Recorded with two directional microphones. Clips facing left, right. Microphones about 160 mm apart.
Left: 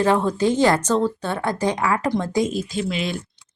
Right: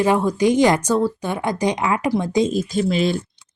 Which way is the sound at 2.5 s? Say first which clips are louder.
Right 5 dB; 40° right (ahead or behind).